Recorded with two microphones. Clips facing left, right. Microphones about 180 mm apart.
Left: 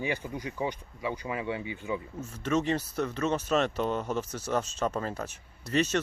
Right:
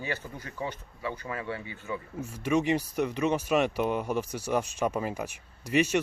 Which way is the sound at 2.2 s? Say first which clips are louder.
Right 3 dB; 10° right (ahead or behind).